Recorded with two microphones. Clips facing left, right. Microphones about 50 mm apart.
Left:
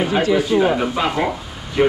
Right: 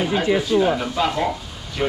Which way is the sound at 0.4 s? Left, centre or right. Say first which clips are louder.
Left 2 dB; left.